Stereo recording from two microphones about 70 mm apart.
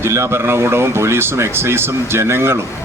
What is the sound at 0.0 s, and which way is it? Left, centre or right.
Speech, right.